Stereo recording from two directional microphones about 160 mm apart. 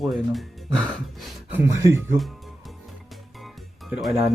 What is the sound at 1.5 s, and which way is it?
Speech, 15° right (ahead or behind).